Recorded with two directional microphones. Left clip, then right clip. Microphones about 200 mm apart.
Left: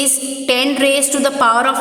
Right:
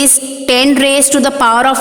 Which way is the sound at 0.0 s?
45° right (ahead or behind).